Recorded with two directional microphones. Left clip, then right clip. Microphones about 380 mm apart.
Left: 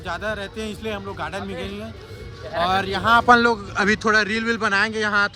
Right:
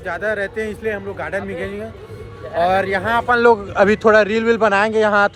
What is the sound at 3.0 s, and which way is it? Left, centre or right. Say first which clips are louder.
Speech: left 5 dB; centre.